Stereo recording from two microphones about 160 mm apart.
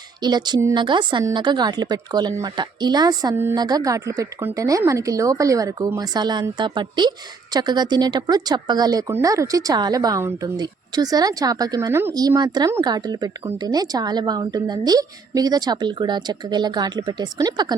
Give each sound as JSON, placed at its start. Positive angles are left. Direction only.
{"t": 0.2, "sound": "speech", "side_deg": -25}